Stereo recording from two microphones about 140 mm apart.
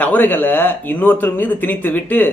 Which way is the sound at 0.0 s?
10° left (ahead or behind).